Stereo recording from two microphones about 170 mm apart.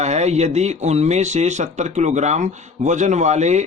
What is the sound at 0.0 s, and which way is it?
A man's voice, 40° right (ahead or behind).